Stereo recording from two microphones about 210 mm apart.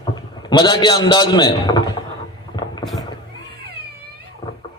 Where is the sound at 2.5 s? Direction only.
20° left (ahead or behind).